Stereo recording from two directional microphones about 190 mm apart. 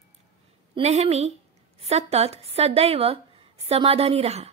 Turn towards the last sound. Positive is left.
turn(degrees=-35)  # may be behind; listen again after turning